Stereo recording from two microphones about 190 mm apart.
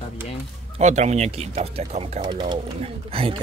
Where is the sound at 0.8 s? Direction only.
35° right (ahead or behind).